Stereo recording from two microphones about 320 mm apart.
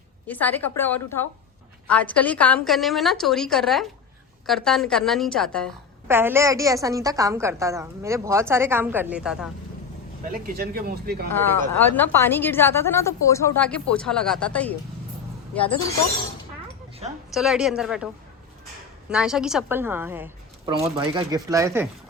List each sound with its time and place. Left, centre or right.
0.3 s a woman's voice: centre
10.3 s speech: right
11.8 s a woman's voice: centre
17.0 s speech: centre
17.3 s a woman's voice: centre
19.1 s a woman's voice: centre